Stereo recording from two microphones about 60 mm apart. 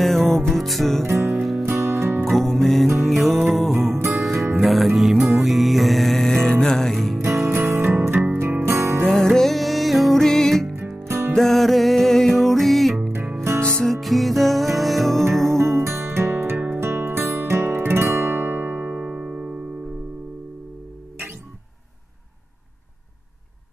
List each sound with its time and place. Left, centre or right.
0.3 s music: centre
1.7 s music: right
2.2 s music: centre
7.2 s music: right
7.4 s music: right
9.0 s music: centre
11.1 s music: right
11.3 s music: centre
13.6 s music: centre
13.9 s music: centre
15.5 s music: right
19.0 s music: centre